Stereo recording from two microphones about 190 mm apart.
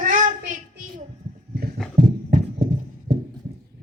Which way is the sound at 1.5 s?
55° right (ahead or behind).